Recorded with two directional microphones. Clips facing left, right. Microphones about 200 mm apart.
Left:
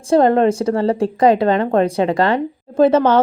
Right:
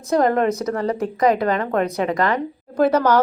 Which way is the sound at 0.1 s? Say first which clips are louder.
Left 5 dB; 30° left (ahead or behind).